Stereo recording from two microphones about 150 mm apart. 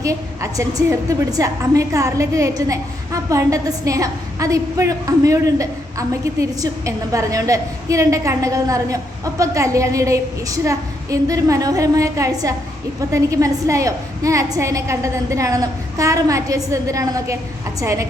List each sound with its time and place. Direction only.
0.0 s a woman's voice: 20° right (ahead or behind)